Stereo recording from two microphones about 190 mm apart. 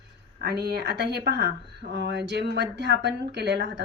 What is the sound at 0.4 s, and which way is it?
Speech, 55° right (ahead or behind).